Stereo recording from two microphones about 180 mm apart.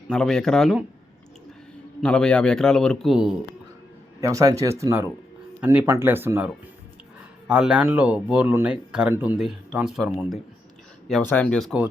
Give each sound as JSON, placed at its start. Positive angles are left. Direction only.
{"t": 0.1, "sound": "speech", "side_deg": 5}
{"t": 2.0, "sound": "speech", "side_deg": 5}
{"t": 4.2, "sound": "speech", "side_deg": -20}